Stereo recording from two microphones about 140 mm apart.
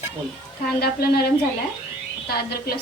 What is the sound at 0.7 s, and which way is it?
Speech, 90° left.